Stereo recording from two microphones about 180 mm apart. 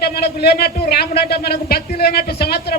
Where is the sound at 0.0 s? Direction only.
60° left (ahead or behind).